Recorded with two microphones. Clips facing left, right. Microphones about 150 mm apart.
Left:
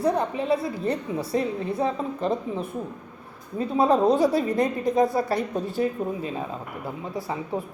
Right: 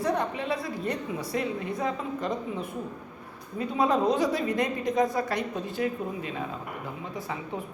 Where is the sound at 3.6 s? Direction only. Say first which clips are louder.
Left 4 dB; 30° left (ahead or behind).